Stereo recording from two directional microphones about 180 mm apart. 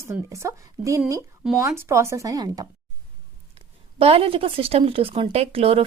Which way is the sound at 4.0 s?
30° right (ahead or behind).